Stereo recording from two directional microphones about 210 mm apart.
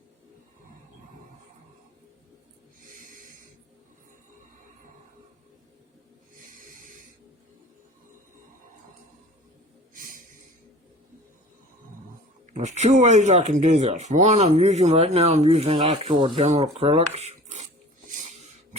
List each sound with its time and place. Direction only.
2.9 s snort: 40° right (ahead or behind)
6.4 s snort: 40° right (ahead or behind)
9.9 s snort: 40° right (ahead or behind)
12.5 s speech: 35° right (ahead or behind)
18.1 s a sound: 35° right (ahead or behind)